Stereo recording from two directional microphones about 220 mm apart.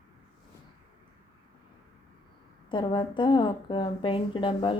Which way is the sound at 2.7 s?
20° left (ahead or behind).